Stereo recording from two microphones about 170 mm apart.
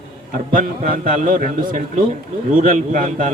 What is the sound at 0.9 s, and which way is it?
A man's voice, 50° right (ahead or behind).